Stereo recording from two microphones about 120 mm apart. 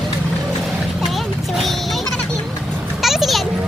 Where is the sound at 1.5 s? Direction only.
Centre (ahead or behind).